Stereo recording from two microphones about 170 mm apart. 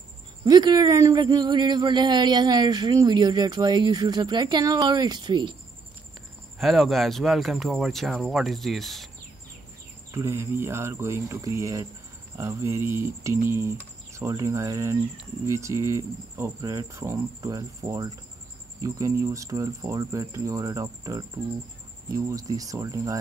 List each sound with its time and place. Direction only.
0.5 s a man's voice: 25° right (ahead or behind)
6.6 s speech: centre (ahead or behind)
10.1 s a man's voice: 15° right (ahead or behind)